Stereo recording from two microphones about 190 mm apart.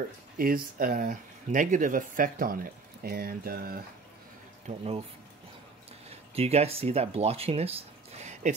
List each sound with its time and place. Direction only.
0.4 s speech: 50° right (ahead or behind)
4.6 s speech: 30° right (ahead or behind)
6.0 s speech: 35° right (ahead or behind)
8.2 s a sound: 40° right (ahead or behind)